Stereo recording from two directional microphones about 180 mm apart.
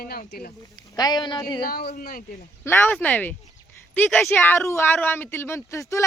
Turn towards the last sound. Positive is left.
turn(degrees=15)  # may be behind; listen again after turning